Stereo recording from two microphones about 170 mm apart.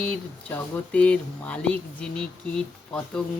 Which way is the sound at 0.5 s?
10° left (ahead or behind).